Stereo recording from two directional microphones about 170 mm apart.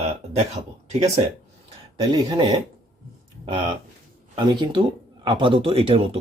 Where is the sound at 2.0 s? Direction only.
25° right (ahead or behind).